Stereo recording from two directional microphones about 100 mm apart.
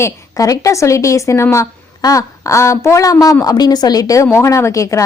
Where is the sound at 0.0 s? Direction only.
35° left (ahead or behind).